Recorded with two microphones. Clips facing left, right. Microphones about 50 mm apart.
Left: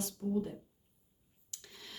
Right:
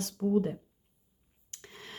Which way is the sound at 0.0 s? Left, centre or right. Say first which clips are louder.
Right 7 dB; right.